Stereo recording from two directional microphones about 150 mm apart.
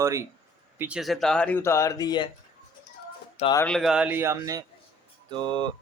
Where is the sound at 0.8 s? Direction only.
5° right (ahead or behind); by 2.3 s 30° left (ahead or behind).